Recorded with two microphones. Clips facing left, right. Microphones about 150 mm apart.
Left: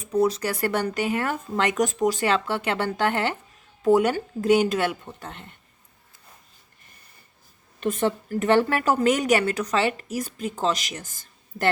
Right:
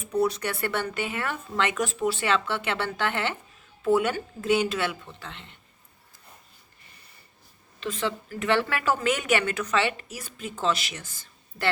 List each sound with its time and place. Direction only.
0.3 s speech: 35° left (ahead or behind)
7.8 s a woman's voice: 50° left (ahead or behind)